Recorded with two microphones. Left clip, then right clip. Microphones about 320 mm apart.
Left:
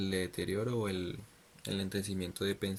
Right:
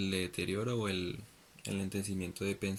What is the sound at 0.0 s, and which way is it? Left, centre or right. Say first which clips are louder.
Speech: even; left.